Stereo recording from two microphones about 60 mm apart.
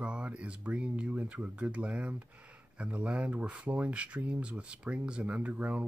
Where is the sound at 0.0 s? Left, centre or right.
Centre.